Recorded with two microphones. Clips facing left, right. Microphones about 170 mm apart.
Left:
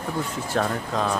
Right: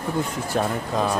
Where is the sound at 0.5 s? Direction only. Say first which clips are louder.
Right 1 dB; 10° right (ahead or behind).